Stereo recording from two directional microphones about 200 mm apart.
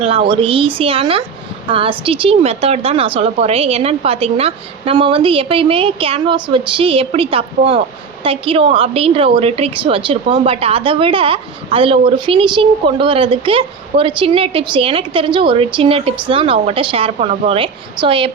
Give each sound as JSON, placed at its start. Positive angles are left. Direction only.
{"t": 0.0, "sound": "a woman's voice", "side_deg": -25}